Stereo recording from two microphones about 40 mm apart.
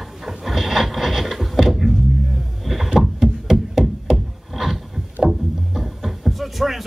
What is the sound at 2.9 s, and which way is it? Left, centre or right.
Wood, centre.